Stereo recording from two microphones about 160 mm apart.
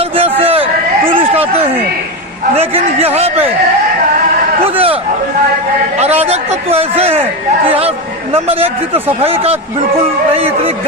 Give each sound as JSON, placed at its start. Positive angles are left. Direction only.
{"t": 0.2, "sound": "a sound", "side_deg": -40}
{"t": 2.6, "sound": "a man's voice", "side_deg": -40}
{"t": 4.6, "sound": "a man's voice", "side_deg": -35}
{"t": 6.2, "sound": "a man's voice", "side_deg": -40}